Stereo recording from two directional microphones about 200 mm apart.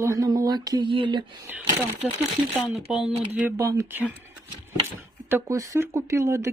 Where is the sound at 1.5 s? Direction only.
10° right (ahead or behind).